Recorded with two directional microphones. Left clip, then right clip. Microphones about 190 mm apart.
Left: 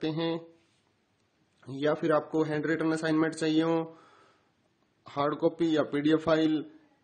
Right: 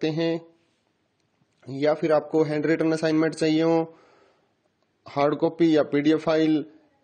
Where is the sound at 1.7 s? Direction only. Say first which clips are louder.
Right 5 dB; 30° right (ahead or behind).